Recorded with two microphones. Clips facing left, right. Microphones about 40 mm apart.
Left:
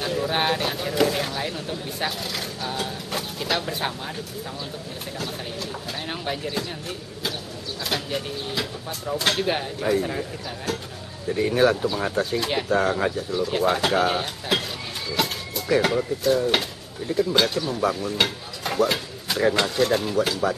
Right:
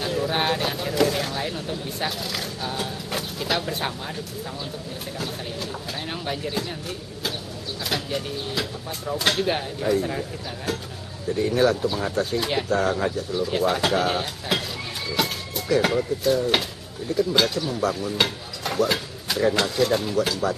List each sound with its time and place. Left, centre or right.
0.0 s speech: centre
6.0 s speech: centre
7.8 s speech: centre
11.3 s speech: left
12.2 s speech: centre
13.3 s speech: centre
15.8 s speech: centre
17.1 s speech: left
18.2 s stir: centre
19.4 s speech: centre